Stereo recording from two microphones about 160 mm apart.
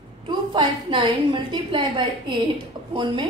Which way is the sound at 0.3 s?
30° right (ahead or behind).